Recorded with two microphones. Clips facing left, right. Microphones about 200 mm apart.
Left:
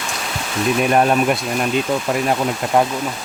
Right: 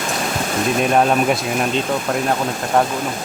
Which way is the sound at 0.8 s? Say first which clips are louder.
Even; 5° left (ahead or behind).